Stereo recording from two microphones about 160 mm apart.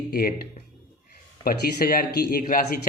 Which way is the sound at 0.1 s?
65° left (ahead or behind).